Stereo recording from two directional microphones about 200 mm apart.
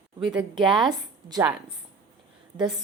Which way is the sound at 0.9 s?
15° right (ahead or behind).